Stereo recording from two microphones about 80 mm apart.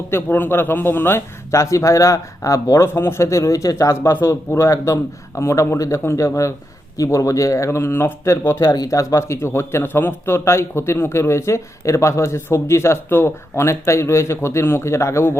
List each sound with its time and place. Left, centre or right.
0.1 s a man's voice: left
8.7 s a man's voice: left